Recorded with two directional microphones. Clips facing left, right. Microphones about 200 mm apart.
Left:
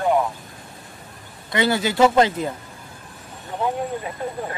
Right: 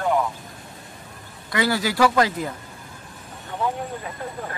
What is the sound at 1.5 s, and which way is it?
A man's voice, 25° left (ahead or behind).